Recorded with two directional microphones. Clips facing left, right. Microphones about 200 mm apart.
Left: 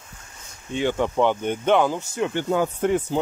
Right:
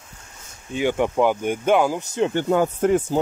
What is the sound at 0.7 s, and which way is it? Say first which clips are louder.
Speech: right 2 dB; 10° right (ahead or behind).